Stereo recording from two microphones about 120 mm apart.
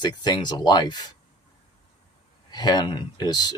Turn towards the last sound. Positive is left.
turn(degrees=35)  # may be behind; listen again after turning